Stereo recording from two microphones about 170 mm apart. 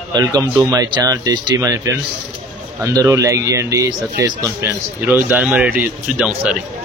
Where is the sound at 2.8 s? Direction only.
20° right (ahead or behind).